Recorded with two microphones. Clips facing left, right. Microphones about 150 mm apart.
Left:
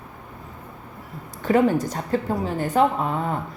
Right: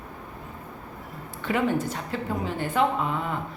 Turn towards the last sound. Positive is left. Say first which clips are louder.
# left 3 dB
turn(degrees=40)  # may be behind; listen again after turning